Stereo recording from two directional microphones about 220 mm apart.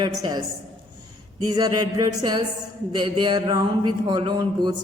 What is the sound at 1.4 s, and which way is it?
Speech, 20° right (ahead or behind).